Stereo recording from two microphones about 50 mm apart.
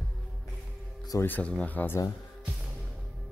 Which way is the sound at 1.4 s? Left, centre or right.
Left.